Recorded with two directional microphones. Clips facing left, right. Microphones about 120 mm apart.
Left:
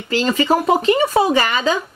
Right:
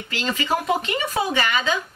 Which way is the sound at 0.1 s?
35° left (ahead or behind).